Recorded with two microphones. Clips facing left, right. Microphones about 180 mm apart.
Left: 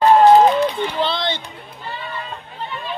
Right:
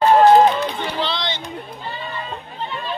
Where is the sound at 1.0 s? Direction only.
50° left (ahead or behind).